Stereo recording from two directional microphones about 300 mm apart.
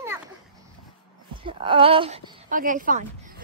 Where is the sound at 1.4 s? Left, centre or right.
Centre.